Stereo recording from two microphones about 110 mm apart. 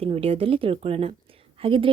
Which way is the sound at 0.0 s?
60° right (ahead or behind).